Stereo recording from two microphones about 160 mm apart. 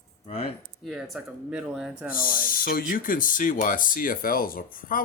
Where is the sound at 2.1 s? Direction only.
60° left (ahead or behind).